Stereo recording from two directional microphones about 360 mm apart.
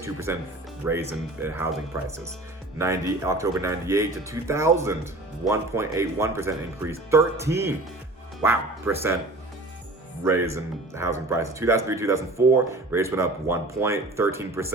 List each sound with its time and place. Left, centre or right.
0.0 s speech: centre
10.2 s speech: centre